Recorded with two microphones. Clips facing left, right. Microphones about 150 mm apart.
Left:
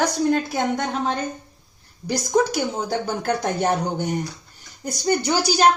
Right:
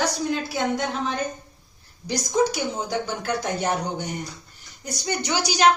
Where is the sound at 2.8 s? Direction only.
50° left (ahead or behind).